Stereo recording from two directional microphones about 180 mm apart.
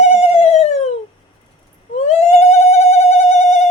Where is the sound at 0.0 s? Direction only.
40° left (ahead or behind).